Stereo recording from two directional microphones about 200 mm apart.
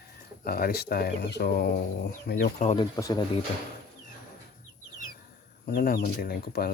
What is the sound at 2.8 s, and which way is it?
Speech, 20° left (ahead or behind).